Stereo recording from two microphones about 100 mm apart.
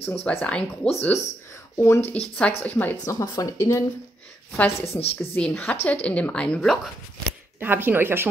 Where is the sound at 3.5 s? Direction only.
30° left (ahead or behind).